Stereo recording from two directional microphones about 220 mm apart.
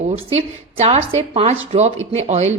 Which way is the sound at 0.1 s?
25° right (ahead or behind).